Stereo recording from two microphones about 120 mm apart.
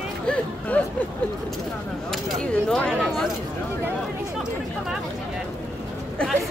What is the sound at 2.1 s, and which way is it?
Speech, 5° left (ahead or behind).